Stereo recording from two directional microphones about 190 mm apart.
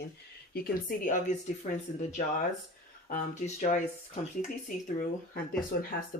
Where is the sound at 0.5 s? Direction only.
50° left (ahead or behind).